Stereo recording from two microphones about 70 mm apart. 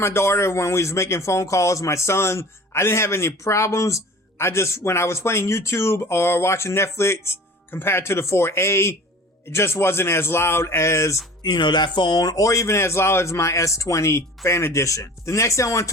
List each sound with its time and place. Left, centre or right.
0.0 s speech: left
11.4 s a man's voice: left